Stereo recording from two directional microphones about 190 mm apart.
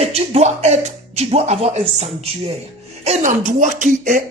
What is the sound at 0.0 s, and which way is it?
Speech, 35° right (ahead or behind).